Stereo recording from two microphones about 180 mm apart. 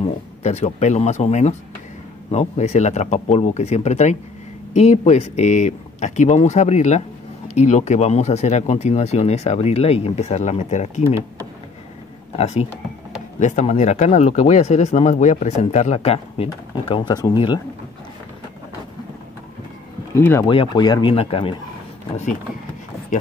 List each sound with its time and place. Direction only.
0.0 s speech: 40° left (ahead or behind)
12.4 s speech: 35° left (ahead or behind)
20.2 s speech: 10° left (ahead or behind)
20.4 s speech: 25° left (ahead or behind)
22.1 s speech: 45° left (ahead or behind)